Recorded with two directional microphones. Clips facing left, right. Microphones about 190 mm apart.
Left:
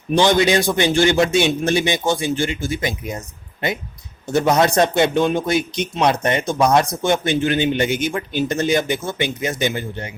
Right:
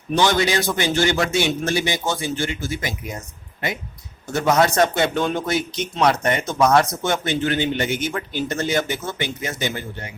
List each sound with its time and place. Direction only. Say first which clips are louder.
0.1 s a man's voice: left 4 dB; 15° left (ahead or behind)
4.3 s speech: left 2 dB; 15° left (ahead or behind)